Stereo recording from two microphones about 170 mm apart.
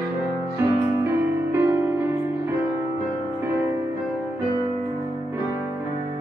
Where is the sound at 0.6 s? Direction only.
15° right (ahead or behind).